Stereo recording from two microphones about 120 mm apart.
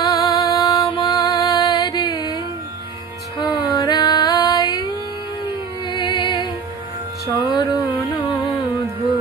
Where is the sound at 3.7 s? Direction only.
35° left (ahead or behind).